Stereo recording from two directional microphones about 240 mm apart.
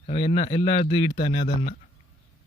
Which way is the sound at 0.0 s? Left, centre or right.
Left.